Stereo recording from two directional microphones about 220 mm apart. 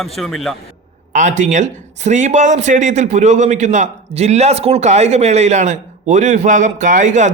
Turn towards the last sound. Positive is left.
turn(degrees=-35)  # may be behind; listen again after turning